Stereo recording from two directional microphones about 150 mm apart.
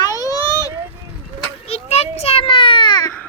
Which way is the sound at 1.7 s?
45° left (ahead or behind).